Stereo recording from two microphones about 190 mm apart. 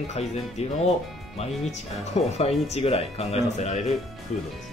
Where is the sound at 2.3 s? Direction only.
35° left (ahead or behind).